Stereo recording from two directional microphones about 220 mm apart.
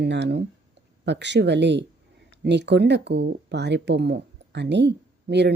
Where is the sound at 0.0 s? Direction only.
50° right (ahead or behind).